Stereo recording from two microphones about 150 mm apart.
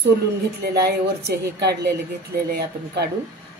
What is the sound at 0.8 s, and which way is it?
Speech, 90° right.